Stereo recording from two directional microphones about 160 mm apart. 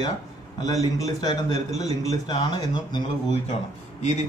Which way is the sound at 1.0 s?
25° left (ahead or behind).